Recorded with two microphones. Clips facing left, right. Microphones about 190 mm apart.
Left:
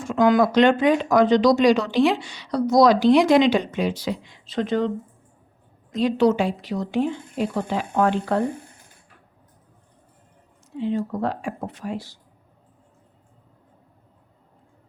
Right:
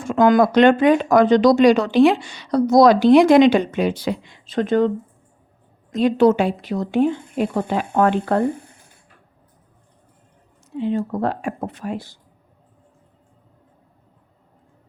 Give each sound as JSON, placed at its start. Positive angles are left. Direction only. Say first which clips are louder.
{"t": 0.0, "sound": "speech", "louder": "right 3 dB", "side_deg": -55}
{"t": 5.9, "sound": "speech", "louder": "right 4 dB", "side_deg": -55}
{"t": 10.8, "sound": "speech", "louder": "right 3 dB", "side_deg": -55}